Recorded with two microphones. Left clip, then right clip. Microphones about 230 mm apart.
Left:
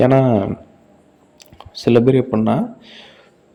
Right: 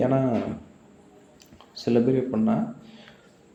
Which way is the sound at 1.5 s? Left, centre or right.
Left.